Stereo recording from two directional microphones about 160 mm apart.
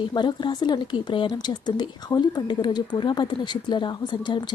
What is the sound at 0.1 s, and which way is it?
Speech, 30° left (ahead or behind).